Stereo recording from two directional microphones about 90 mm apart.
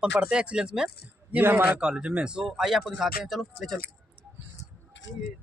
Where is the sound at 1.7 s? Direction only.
10° right (ahead or behind).